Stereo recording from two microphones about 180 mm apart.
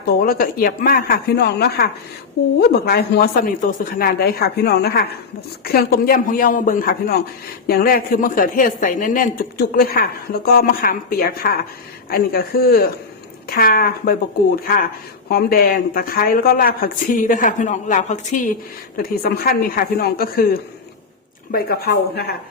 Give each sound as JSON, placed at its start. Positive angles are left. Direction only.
{"t": 0.0, "sound": "a man's voice", "side_deg": 55}
{"t": 18.9, "sound": "a man's voice", "side_deg": 55}